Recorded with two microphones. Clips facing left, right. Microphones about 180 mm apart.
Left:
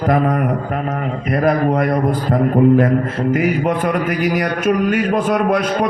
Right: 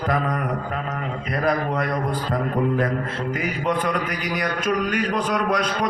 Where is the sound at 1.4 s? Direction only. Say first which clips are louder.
Left 7 dB; 45° left (ahead or behind).